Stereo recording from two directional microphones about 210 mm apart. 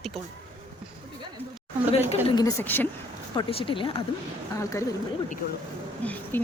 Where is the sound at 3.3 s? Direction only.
25° left (ahead or behind).